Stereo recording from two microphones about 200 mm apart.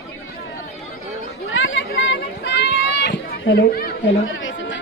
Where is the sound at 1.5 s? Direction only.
70° left (ahead or behind).